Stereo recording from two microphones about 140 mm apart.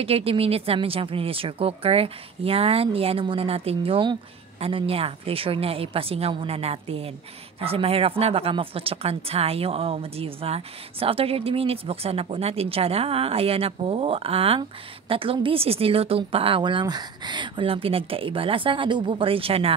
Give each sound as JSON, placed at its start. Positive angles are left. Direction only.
{"t": 0.0, "sound": "speech", "side_deg": -45}